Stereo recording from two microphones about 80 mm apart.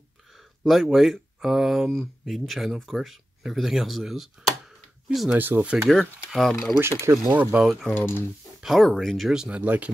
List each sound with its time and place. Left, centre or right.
0.3 s speech: centre
5.4 s speech: right
6.3 s speech: centre
6.8 s speech: right
7.2 s speech: centre
7.9 s speech: left
8.6 s speech: centre
9.6 s speech: right